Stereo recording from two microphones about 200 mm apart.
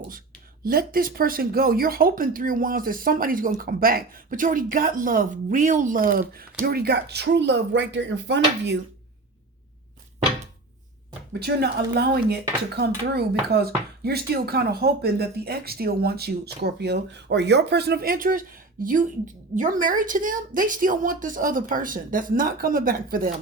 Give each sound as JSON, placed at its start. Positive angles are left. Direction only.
{"t": 0.6, "sound": "speech", "side_deg": -45}
{"t": 11.3, "sound": "speech", "side_deg": -55}